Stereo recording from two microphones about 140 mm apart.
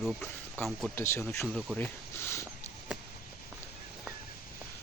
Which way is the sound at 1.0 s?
20° left (ahead or behind).